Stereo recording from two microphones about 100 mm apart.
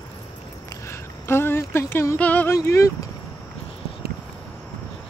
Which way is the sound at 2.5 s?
30° left (ahead or behind).